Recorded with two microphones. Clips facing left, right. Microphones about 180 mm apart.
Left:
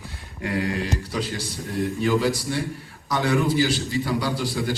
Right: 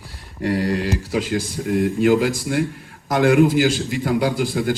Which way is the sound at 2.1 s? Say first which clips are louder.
Right 3 dB; 50° right (ahead or behind).